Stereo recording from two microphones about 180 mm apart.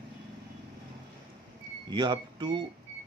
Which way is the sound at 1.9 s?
25° right (ahead or behind).